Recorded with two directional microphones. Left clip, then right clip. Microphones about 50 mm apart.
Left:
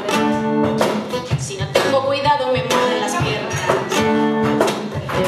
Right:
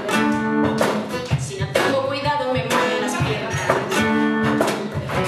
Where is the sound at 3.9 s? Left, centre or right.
Centre.